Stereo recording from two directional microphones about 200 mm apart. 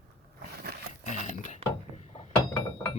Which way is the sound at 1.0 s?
40° left (ahead or behind).